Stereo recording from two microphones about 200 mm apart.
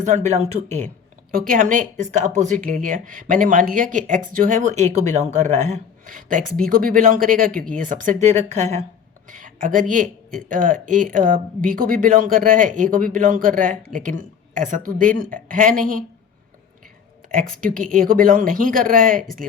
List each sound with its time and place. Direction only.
0.0 s speech: 35° right (ahead or behind)
1.3 s speech: 45° right (ahead or behind)
17.3 s speech: 45° right (ahead or behind)